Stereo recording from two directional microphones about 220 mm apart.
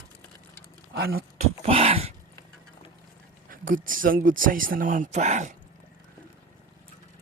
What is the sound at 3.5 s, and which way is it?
Speech, 40° right (ahead or behind).